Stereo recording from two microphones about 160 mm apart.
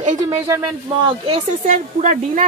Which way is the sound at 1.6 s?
55° right (ahead or behind).